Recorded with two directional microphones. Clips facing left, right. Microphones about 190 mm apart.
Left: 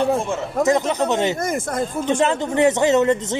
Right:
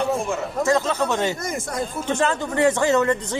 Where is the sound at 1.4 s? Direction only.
50° left (ahead or behind).